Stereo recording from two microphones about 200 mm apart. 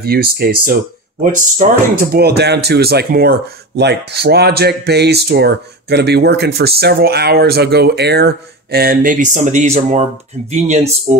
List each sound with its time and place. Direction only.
0.0 s speech: 50° right (ahead or behind); by 10.9 s 35° right (ahead or behind)